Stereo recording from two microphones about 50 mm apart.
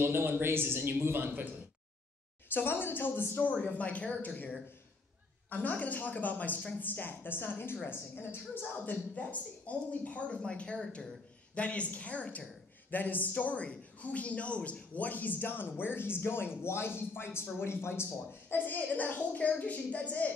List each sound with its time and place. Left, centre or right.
0.0 s a man's voice: right
2.5 s speech: left
3.3 s a woman's voice: left
9.1 s a woman's voice: left; by 11.1 s centre
11.5 s a woman's voice: left
18.5 s a woman's voice: left